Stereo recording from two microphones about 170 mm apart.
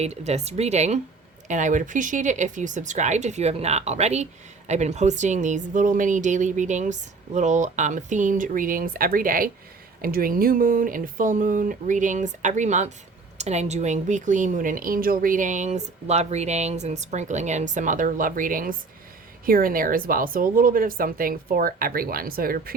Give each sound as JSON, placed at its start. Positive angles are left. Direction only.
{"t": 0.0, "sound": "speech", "side_deg": -40}